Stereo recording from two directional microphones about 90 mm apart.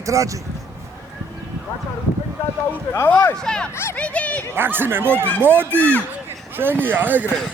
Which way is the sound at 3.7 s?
30° left (ahead or behind).